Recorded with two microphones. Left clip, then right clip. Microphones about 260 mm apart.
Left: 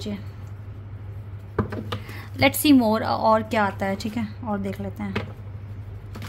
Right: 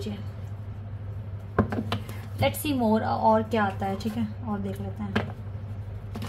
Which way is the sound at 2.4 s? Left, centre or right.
Left.